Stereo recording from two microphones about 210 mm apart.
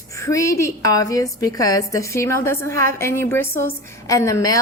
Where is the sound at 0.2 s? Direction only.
15° left (ahead or behind).